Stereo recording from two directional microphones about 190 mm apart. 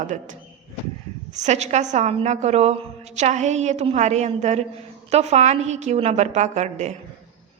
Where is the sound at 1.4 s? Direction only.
35° right (ahead or behind).